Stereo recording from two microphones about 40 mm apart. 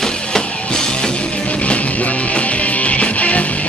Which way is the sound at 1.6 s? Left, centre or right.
Left.